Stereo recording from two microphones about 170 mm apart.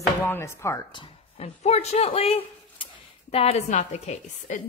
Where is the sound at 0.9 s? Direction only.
40° left (ahead or behind).